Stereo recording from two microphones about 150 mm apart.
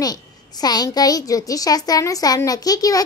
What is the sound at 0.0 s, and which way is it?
A child's voice, 25° left (ahead or behind).